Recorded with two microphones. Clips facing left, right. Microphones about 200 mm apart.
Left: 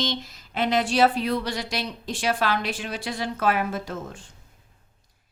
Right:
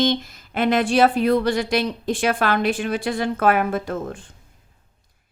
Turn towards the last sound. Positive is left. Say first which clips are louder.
# right 6 dB
turn(degrees=-55)  # may be behind; listen again after turning